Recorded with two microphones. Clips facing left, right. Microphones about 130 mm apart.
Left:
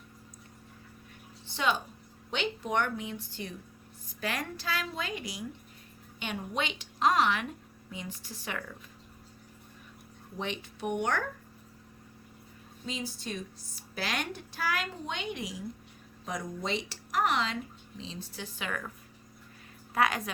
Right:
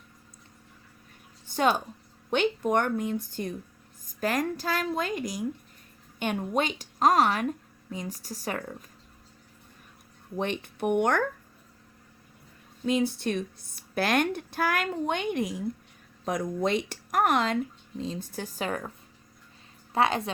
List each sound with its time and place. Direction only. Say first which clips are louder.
1.5 s a woman's voice: right 5 dB; 45° right (ahead or behind)
10.3 s a woman's voice: right 6 dB; 55° right (ahead or behind)
12.8 s a woman's voice: right 12 dB; 60° right (ahead or behind); by 18.9 s 35° right (ahead or behind)
19.9 s a woman's voice: right 3 dB; 30° right (ahead or behind)